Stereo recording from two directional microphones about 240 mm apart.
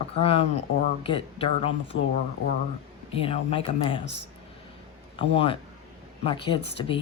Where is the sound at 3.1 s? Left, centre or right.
Left.